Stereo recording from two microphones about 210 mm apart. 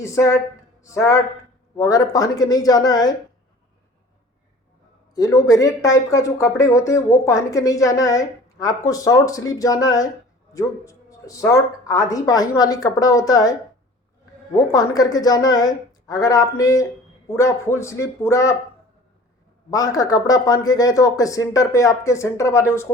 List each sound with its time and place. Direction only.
0.0 s speech: 15° left (ahead or behind)
5.1 s speech: 15° left (ahead or behind)
19.7 s speech: 15° left (ahead or behind)